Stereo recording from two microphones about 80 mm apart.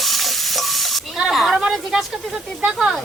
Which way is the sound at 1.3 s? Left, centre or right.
Centre.